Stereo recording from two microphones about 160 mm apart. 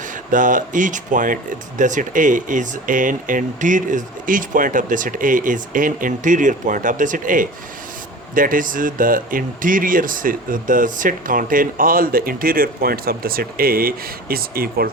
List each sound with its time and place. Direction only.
0.3 s speech: 55° right (ahead or behind)